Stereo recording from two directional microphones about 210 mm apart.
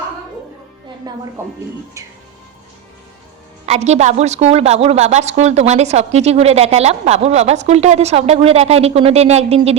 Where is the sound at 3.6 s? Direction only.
30° right (ahead or behind).